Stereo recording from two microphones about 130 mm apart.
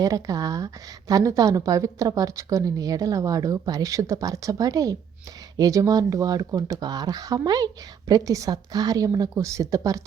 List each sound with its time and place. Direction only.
0.0 s a woman's voice: 25° right (ahead or behind)